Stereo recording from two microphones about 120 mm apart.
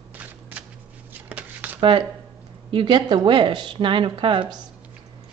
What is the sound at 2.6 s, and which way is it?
A woman's voice, 45° right (ahead or behind).